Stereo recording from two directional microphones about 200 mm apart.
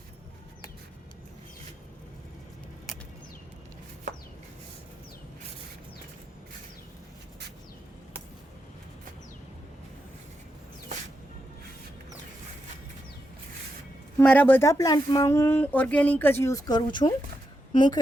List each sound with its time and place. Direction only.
14.2 s a woman's voice: 10° left (ahead or behind)